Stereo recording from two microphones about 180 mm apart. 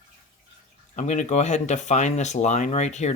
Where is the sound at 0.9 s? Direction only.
40° left (ahead or behind).